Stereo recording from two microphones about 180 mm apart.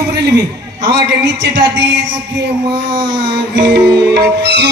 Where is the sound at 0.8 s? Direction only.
75° right (ahead or behind).